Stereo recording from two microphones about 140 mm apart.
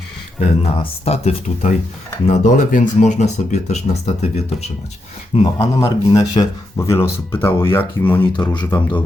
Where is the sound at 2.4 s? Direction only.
70° left (ahead or behind); by 4.4 s 50° left (ahead or behind).